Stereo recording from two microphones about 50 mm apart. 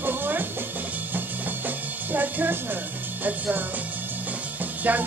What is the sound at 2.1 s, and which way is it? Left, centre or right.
Music, right.